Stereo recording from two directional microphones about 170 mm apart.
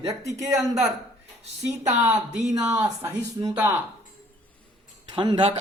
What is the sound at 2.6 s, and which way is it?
Speech, 20° right (ahead or behind).